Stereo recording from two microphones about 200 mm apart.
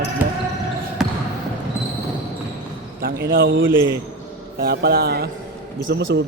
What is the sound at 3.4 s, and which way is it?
Speech, 70° right (ahead or behind).